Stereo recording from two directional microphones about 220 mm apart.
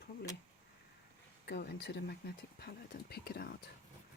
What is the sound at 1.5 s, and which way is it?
Speech, 50° left (ahead or behind).